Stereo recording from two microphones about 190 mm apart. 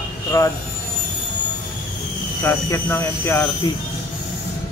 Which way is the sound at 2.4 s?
15° left (ahead or behind).